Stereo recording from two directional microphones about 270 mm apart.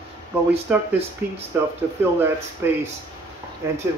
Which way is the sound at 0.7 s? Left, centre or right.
Centre.